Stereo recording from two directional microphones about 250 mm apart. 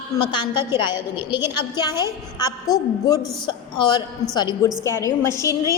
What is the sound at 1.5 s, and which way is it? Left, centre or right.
A woman's voice, centre.